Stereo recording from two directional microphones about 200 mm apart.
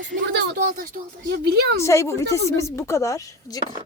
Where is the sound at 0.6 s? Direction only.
45° right (ahead or behind).